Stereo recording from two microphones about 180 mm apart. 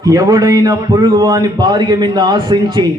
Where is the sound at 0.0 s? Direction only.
20° right (ahead or behind).